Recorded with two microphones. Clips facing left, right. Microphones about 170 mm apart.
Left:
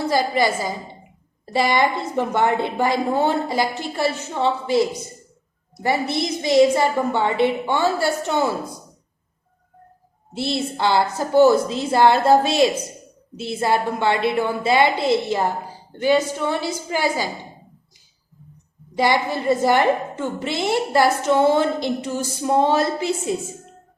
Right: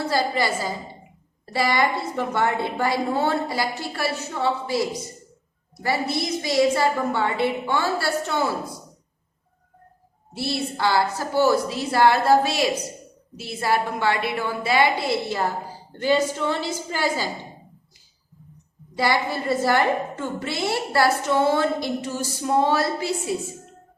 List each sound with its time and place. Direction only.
0.0 s a woman's voice: 15° left (ahead or behind)
10.3 s a woman's voice: 20° left (ahead or behind)
18.9 s a woman's voice: 20° left (ahead or behind)